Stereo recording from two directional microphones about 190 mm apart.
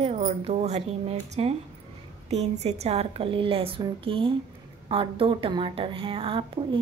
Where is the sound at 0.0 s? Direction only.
30° right (ahead or behind).